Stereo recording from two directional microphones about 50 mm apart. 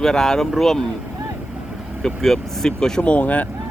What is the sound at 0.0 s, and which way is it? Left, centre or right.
Speech, centre.